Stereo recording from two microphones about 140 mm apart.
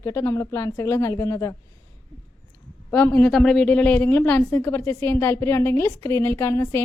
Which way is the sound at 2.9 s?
15° left (ahead or behind).